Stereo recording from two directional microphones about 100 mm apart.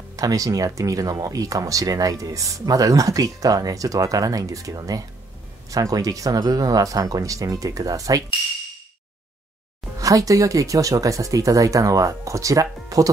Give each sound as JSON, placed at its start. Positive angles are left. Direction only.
{"t": 0.1, "sound": "speech", "side_deg": -35}
{"t": 9.9, "sound": "speech", "side_deg": -35}